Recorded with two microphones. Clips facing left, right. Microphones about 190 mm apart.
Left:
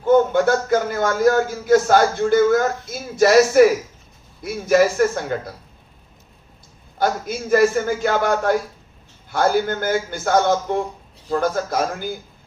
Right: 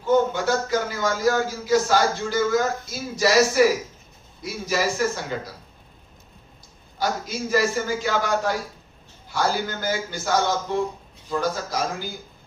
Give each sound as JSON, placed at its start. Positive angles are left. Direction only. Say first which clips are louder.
{"t": 0.0, "sound": "a man's voice", "louder": "left 5 dB", "side_deg": 55}
{"t": 7.0, "sound": "a man's voice", "louder": "left 4 dB", "side_deg": 55}